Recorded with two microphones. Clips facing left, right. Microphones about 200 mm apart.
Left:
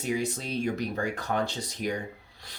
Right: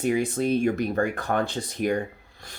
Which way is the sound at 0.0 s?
55° right (ahead or behind).